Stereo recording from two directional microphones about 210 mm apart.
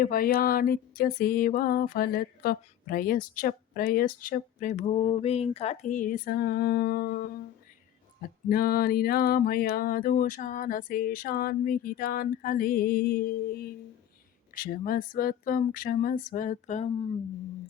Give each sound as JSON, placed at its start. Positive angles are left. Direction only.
{"t": 0.0, "sound": "music", "side_deg": 45}
{"t": 8.4, "sound": "music", "side_deg": 45}
{"t": 14.5, "sound": "a sound", "side_deg": 40}